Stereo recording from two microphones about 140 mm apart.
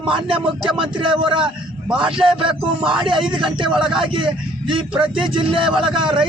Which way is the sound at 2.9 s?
35° right (ahead or behind).